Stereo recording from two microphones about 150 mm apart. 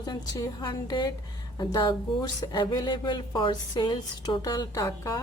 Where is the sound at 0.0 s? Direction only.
25° left (ahead or behind).